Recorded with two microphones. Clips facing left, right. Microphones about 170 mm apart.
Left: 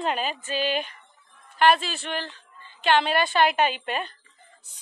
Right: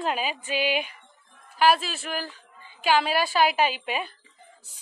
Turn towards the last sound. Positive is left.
turn(degrees=-5)  # may be behind; listen again after turning